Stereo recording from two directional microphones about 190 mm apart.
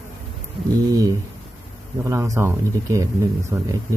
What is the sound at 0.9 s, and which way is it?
Speech, 20° right (ahead or behind).